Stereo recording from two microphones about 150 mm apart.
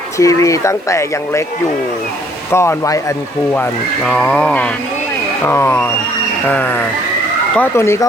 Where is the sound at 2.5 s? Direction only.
20° left (ahead or behind).